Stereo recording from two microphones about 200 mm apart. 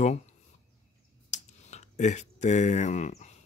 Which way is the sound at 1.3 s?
35° left (ahead or behind).